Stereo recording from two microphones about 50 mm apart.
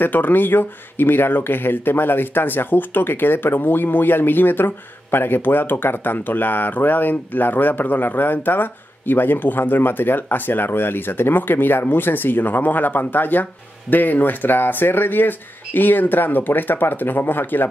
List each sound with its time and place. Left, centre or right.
0.0 s speech: left